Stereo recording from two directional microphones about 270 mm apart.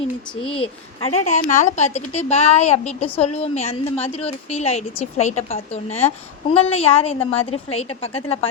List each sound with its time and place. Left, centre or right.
0.4 s a woman's voice: centre